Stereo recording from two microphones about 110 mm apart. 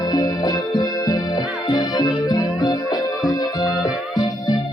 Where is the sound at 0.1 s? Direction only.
40° left (ahead or behind).